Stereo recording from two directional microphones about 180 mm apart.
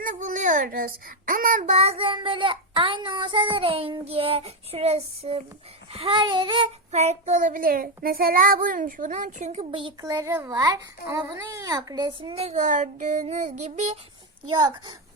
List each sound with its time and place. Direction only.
0.0 s child singing: 45° right (ahead or behind)
5.9 s a child's voice: 30° right (ahead or behind)
6.9 s a child's voice: 40° right (ahead or behind)
10.1 s a child's voice: 15° right (ahead or behind); by 14.0 s 40° right (ahead or behind)
14.4 s a child's voice: 25° right (ahead or behind)